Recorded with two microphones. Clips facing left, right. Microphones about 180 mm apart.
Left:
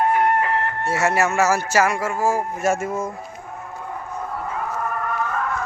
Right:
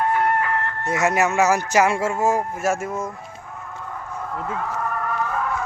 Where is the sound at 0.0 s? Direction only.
20° left (ahead or behind).